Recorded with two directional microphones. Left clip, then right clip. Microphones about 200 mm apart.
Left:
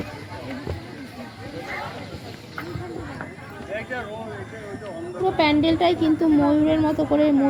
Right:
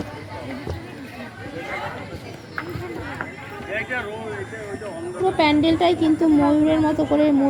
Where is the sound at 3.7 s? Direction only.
40° left (ahead or behind).